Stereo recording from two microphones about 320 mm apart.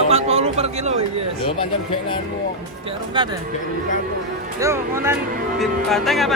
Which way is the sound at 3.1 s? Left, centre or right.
Centre.